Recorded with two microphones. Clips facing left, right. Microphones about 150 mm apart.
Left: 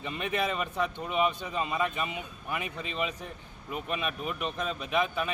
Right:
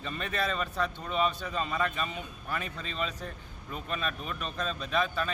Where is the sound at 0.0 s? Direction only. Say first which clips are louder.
Left 2 dB; 15° left (ahead or behind).